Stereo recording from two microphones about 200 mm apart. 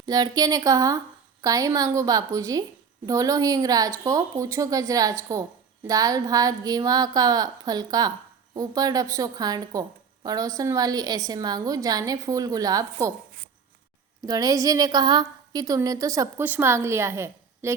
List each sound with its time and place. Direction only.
0.0 s a woman's voice: 20° right (ahead or behind)
14.3 s a woman's voice: 20° right (ahead or behind)